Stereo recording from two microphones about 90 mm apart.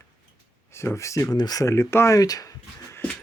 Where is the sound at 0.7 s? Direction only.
30° left (ahead or behind).